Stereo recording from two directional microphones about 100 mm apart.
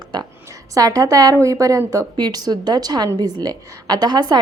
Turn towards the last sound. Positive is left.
turn(degrees=-45)  # may be behind; listen again after turning